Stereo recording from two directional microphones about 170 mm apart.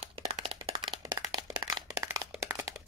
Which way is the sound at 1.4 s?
20° right (ahead or behind).